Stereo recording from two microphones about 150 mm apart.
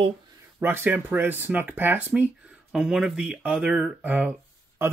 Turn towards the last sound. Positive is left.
turn(degrees=-15)  # may be behind; listen again after turning